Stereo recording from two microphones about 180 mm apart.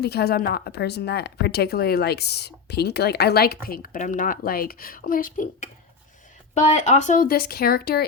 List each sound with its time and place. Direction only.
0.0 s speech: 60° left (ahead or behind)
6.5 s speech: 40° left (ahead or behind); by 8.0 s 55° left (ahead or behind)